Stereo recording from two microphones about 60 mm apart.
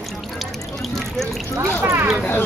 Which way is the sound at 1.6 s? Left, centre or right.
Right.